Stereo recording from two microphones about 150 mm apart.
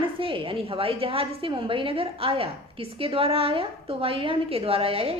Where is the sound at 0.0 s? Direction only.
35° right (ahead or behind).